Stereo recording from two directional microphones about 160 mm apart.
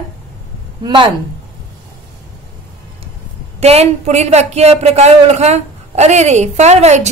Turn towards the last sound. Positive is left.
turn(degrees=-45)  # may be behind; listen again after turning